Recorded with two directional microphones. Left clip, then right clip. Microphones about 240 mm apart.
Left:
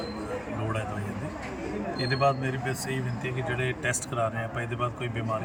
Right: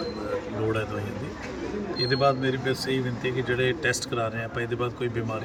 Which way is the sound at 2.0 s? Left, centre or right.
Centre.